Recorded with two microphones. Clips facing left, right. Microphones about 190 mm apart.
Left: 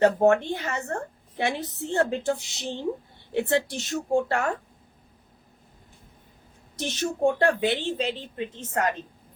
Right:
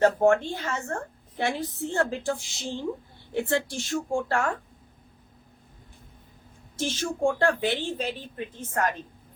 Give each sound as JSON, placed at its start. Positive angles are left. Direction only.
{"t": 0.0, "sound": "a woman's voice", "side_deg": 20}
{"t": 2.4, "sound": "a woman's voice", "side_deg": 65}
{"t": 3.5, "sound": "a woman's voice", "side_deg": 20}
{"t": 6.7, "sound": "a woman's voice", "side_deg": 20}